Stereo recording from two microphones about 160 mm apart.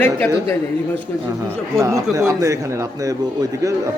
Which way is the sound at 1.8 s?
20° right (ahead or behind).